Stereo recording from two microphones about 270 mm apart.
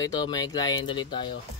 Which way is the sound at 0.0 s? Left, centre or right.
Centre.